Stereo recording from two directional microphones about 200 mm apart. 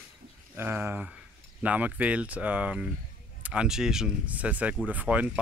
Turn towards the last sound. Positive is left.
turn(degrees=-5)  # may be behind; listen again after turning